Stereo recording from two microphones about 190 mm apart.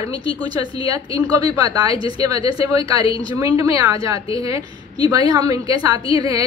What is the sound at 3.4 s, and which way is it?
A woman's voice, 20° right (ahead or behind).